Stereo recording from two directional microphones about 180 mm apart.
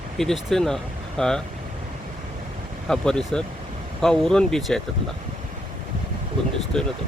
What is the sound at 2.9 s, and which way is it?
Speech, 5° left (ahead or behind).